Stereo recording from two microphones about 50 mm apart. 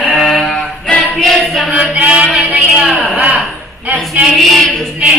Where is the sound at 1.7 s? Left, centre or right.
Right.